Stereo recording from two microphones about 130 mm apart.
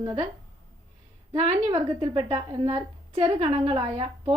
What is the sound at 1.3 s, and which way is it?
A woman's voice, 50° right (ahead or behind).